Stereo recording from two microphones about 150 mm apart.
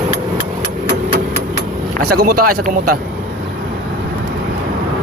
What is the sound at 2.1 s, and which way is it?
Speech, 70° right (ahead or behind).